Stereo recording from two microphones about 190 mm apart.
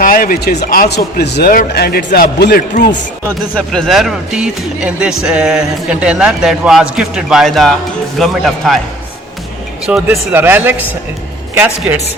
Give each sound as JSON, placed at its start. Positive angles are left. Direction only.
{"t": 0.0, "sound": "speech", "side_deg": 45}
{"t": 3.2, "sound": "a man's voice", "side_deg": 5}
{"t": 9.8, "sound": "speech", "side_deg": 0}